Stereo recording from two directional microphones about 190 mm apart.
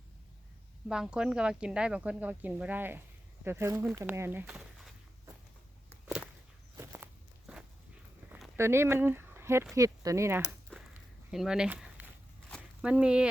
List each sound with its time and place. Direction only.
0.9 s speech: 5° right (ahead or behind)
6.7 s walk: 15° right (ahead or behind)
8.3 s a sound: 10° right (ahead or behind)
9.7 s speech: 15° right (ahead or behind)
10.7 s a sound: 5° left (ahead or behind)
11.3 s speech: 5° right (ahead or behind)